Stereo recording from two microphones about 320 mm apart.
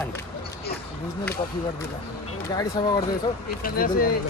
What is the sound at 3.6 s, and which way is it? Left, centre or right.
Speech, left.